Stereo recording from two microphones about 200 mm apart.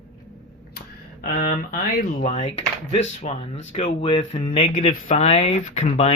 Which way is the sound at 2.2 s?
30° left (ahead or behind).